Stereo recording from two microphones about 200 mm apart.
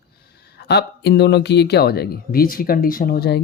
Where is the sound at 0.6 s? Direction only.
55° left (ahead or behind).